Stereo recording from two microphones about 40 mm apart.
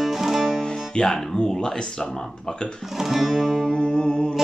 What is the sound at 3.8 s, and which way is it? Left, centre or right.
Music, left.